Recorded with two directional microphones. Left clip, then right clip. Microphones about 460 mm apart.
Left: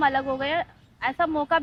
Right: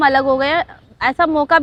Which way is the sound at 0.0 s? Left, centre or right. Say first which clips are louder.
Right 10 dB; right.